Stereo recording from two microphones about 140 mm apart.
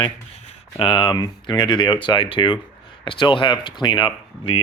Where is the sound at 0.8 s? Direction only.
40° left (ahead or behind).